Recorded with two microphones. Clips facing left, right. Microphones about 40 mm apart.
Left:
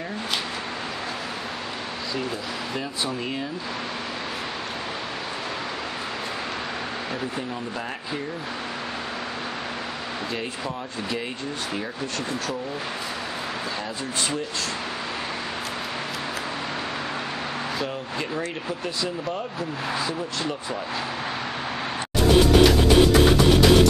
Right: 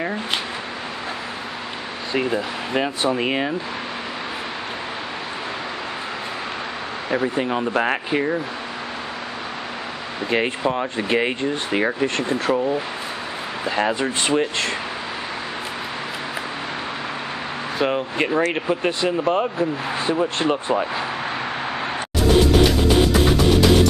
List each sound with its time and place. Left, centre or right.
2.1 s speech: right
7.1 s speech: right
7.5 s speech: right
10.3 s speech: right
13.7 s speech: right
17.7 s speech: right
22.7 s music: centre